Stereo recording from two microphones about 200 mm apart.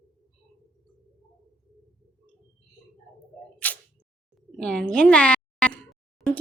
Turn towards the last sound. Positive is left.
turn(degrees=5)  # may be behind; listen again after turning